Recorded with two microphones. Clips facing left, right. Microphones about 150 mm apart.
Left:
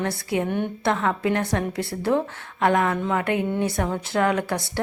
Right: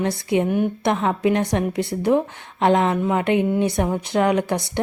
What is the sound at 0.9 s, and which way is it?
A woman's voice, 20° right (ahead or behind).